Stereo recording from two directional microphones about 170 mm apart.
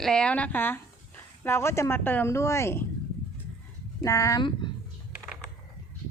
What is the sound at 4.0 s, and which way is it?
Speech, 20° left (ahead or behind).